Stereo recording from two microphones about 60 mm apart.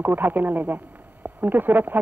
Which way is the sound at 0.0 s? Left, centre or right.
Right.